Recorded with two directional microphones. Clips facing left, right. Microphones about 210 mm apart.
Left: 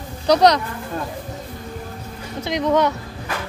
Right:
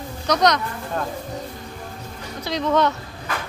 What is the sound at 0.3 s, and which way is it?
Speech, 30° left (ahead or behind).